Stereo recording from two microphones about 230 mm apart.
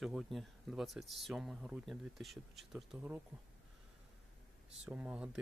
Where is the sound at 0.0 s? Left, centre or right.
Centre.